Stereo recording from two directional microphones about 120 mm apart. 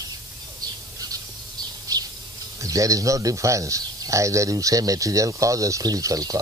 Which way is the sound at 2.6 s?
30° right (ahead or behind).